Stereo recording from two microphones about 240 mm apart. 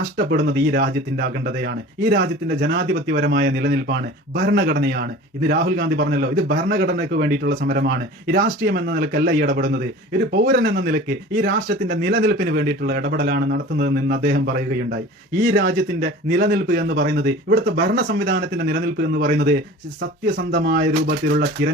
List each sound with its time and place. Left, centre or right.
0.3 s speech: right